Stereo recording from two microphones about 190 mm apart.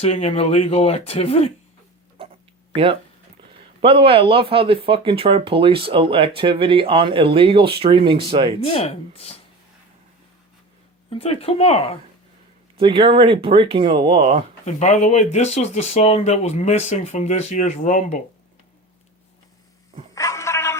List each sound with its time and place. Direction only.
0.0 s speech: 35° left (ahead or behind)
3.8 s speech: 30° right (ahead or behind)
8.6 s speech: 30° left (ahead or behind)
11.1 s speech: 30° left (ahead or behind)
12.7 s speech: 30° right (ahead or behind)
14.6 s speech: 35° left (ahead or behind)
20.1 s a sound: 15° left (ahead or behind)